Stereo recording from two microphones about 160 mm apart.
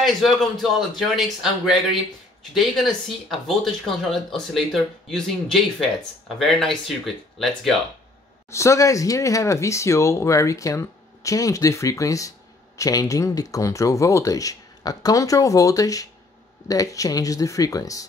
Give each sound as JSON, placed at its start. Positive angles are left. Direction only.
{"t": 0.0, "sound": "speech", "side_deg": 0}
{"t": 3.3, "sound": "speech", "side_deg": 0}
{"t": 8.5, "sound": "speech", "side_deg": 20}